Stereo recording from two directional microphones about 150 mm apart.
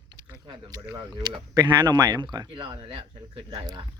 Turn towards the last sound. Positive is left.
turn(degrees=-30)  # may be behind; listen again after turning